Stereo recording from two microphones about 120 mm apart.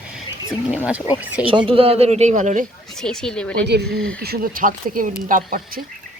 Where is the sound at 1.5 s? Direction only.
45° right (ahead or behind); by 2.6 s 90° right.